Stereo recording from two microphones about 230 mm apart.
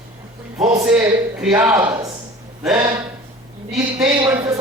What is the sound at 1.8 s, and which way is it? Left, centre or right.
Speech, centre.